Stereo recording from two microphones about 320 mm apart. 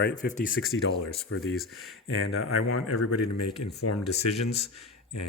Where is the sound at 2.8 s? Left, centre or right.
Left.